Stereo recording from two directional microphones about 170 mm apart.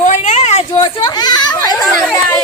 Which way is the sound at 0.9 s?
25° left (ahead or behind).